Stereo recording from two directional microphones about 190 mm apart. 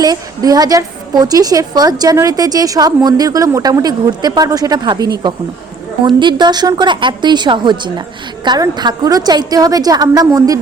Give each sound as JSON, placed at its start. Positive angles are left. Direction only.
{"t": 0.0, "sound": "a woman's voice", "side_deg": -20}